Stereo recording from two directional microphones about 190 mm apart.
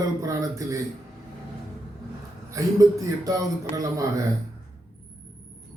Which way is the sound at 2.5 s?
20° right (ahead or behind).